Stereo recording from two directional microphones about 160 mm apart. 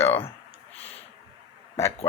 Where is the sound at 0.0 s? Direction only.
40° left (ahead or behind).